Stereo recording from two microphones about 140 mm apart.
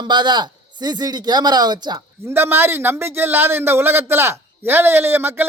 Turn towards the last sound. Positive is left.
turn(degrees=-15)  # may be behind; listen again after turning